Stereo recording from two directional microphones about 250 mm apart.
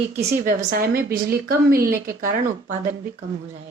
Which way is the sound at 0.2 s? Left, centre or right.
Right.